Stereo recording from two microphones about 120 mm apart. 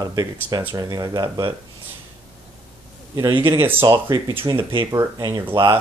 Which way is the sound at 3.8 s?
35° right (ahead or behind).